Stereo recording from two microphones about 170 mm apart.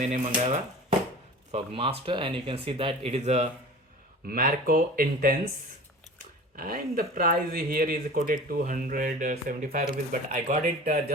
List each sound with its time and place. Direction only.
0.3 s speech: 30° right (ahead or behind)
4.3 s speech: 55° right (ahead or behind)
6.6 s speech: 55° right (ahead or behind)